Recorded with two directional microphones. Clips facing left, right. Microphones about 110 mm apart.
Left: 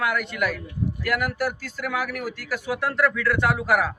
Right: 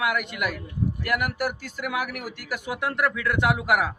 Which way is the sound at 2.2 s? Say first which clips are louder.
Left 5 dB; 45° left (ahead or behind).